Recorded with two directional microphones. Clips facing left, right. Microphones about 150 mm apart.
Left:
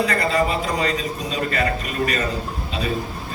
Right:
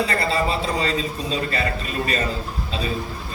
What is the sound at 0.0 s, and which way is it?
A man's voice, 30° right (ahead or behind).